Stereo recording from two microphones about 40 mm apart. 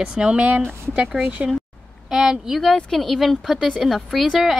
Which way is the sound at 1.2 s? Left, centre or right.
Right.